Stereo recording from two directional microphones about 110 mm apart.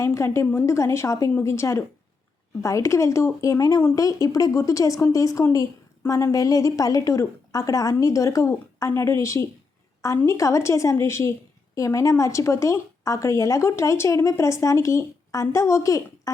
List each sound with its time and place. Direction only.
0.0 s a woman's voice: 25° left (ahead or behind)